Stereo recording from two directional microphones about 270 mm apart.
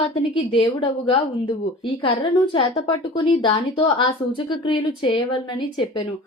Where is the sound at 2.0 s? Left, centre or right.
Left.